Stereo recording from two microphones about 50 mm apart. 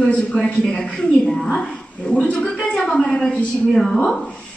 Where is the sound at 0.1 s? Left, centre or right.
Left.